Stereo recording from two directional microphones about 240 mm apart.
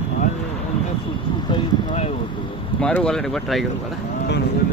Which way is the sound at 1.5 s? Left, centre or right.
Left.